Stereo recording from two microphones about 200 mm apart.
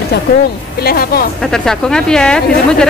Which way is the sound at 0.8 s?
50° left (ahead or behind).